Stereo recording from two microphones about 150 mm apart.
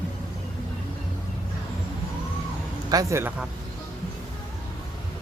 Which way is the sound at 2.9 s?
20° right (ahead or behind).